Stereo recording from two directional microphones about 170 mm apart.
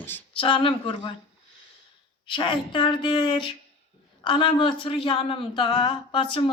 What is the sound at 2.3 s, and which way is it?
A woman's voice, 30° left (ahead or behind).